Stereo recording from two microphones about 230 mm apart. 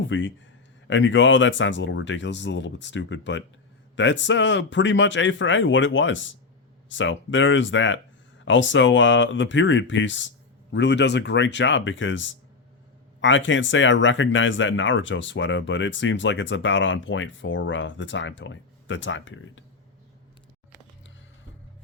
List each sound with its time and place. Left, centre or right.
0.0 s speech: left